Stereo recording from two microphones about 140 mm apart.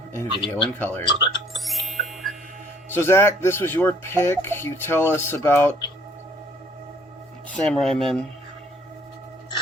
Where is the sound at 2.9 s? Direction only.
15° left (ahead or behind).